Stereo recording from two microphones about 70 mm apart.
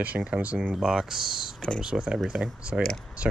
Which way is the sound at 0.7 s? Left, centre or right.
Centre.